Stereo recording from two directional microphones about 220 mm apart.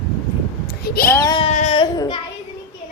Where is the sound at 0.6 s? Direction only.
45° left (ahead or behind).